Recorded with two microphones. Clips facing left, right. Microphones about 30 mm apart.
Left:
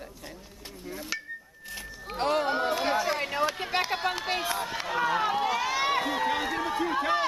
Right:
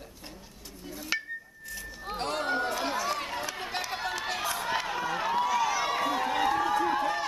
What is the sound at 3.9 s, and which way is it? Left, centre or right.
Speech, left.